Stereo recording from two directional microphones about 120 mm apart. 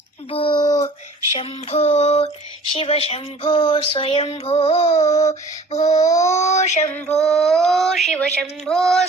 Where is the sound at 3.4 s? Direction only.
45° left (ahead or behind).